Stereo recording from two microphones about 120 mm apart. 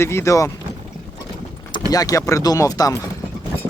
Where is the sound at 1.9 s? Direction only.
30° left (ahead or behind).